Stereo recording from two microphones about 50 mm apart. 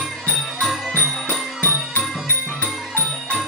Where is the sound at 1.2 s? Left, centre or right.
Left.